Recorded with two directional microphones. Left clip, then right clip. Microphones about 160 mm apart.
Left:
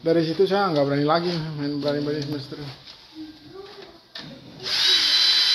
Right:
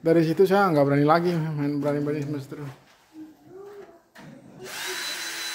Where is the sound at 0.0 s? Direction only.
30° right (ahead or behind).